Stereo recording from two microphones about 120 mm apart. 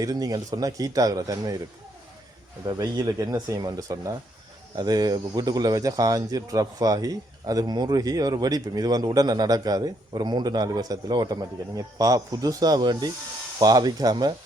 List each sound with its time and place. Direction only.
0.0 s speech: 30° right (ahead or behind)
2.6 s speech: 30° right (ahead or behind)